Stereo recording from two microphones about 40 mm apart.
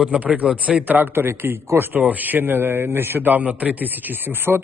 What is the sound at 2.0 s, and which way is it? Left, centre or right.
Speech, right.